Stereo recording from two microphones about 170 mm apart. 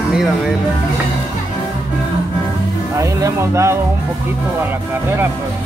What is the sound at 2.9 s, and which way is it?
Speech, 15° right (ahead or behind).